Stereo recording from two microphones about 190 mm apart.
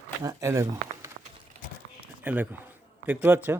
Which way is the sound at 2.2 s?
10° right (ahead or behind).